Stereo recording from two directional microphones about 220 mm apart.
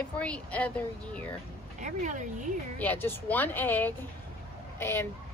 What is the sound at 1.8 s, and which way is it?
Speech, 35° right (ahead or behind).